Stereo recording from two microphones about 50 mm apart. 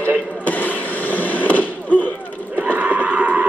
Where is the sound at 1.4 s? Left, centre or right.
Left.